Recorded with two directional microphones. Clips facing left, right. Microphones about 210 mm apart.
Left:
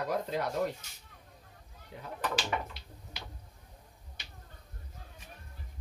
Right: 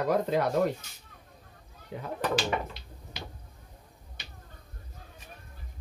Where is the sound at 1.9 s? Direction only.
85° right.